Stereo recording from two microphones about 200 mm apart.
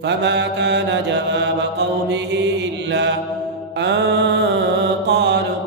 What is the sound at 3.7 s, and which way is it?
Music, 60° right (ahead or behind).